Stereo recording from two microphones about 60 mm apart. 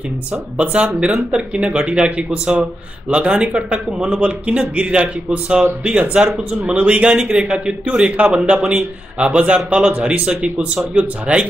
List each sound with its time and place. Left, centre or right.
0.6 s speech: centre